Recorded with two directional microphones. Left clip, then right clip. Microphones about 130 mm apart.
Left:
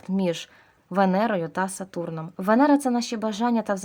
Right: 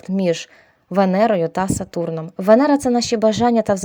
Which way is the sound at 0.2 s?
30° right (ahead or behind).